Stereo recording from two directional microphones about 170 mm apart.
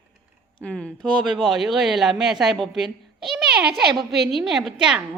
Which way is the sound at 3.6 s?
70° right (ahead or behind).